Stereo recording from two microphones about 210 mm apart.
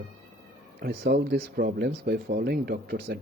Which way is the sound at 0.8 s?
50° right (ahead or behind).